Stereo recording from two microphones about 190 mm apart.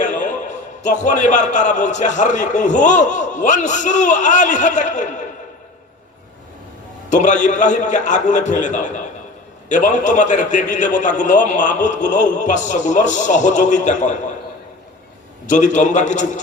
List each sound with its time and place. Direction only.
0.0 s a sound: 40° left (ahead or behind)
0.8 s a man's voice: 40° left (ahead or behind)
7.1 s a man's voice: 40° left (ahead or behind)
15.4 s a man's voice: 40° left (ahead or behind)